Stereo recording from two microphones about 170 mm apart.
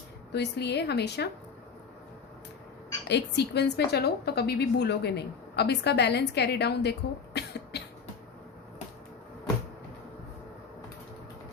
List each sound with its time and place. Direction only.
0.3 s speech: 85° left
3.1 s a woman's voice: 90° left
7.3 s cough: 80° left